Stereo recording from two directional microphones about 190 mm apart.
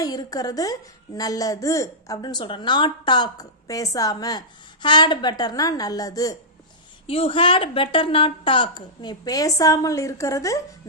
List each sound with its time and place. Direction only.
0.0 s a woman's voice: 20° left (ahead or behind)